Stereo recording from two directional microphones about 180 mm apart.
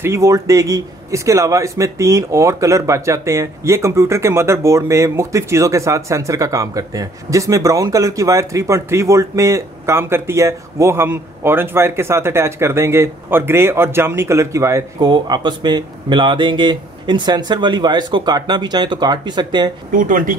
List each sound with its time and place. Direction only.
0.0 s a man's voice: 15° right (ahead or behind)
19.9 s speech: 50° right (ahead or behind)